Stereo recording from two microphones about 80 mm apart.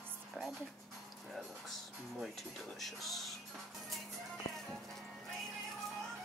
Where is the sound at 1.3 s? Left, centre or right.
Centre.